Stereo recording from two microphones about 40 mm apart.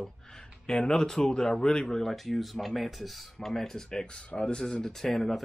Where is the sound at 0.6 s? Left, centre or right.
Centre.